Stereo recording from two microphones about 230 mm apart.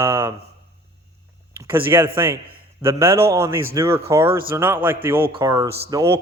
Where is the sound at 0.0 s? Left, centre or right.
Centre.